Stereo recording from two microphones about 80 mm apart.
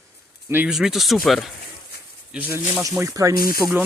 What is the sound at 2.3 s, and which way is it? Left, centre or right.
Speech, right.